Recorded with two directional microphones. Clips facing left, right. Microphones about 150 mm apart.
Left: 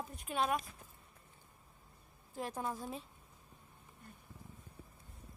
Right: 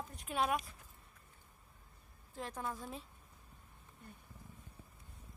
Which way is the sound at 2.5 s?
15° left (ahead or behind).